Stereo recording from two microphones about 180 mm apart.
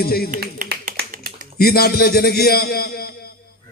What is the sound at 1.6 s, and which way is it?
A man's voice, 60° left (ahead or behind).